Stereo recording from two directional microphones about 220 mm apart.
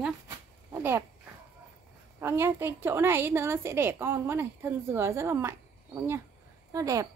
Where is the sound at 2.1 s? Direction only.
10° right (ahead or behind).